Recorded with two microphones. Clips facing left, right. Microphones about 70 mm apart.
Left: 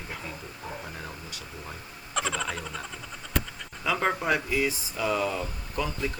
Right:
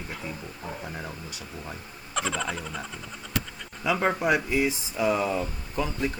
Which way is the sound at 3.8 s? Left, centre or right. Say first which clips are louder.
Right 2 dB; centre.